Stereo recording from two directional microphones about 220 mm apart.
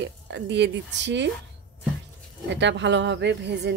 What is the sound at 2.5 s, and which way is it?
Speech, 55° right (ahead or behind).